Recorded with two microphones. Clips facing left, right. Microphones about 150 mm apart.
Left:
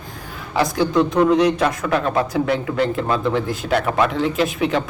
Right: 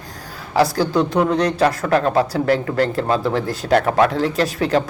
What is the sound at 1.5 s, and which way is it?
Speech, 35° right (ahead or behind).